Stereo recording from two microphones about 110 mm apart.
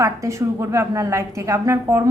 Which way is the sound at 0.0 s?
25° right (ahead or behind).